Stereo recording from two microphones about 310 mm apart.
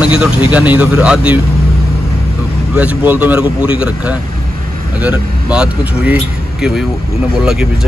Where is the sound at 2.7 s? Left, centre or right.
Centre.